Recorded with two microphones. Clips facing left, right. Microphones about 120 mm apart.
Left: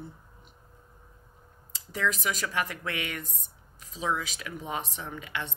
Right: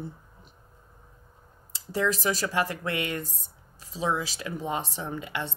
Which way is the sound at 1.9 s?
35° right (ahead or behind).